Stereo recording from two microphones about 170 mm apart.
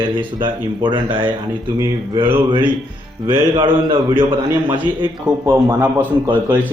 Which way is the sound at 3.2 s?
25° right (ahead or behind).